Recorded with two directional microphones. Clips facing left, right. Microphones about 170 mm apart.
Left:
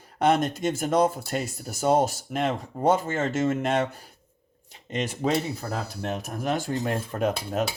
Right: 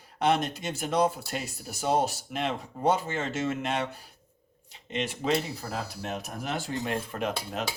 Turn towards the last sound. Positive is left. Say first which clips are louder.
# left 6 dB
turn(degrees=40)  # may be behind; listen again after turning